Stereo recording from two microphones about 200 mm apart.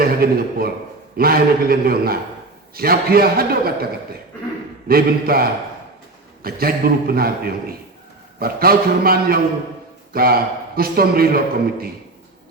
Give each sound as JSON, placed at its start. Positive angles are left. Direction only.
{"t": 0.0, "sound": "a man's voice", "side_deg": -50}
{"t": 4.9, "sound": "a man's voice", "side_deg": -50}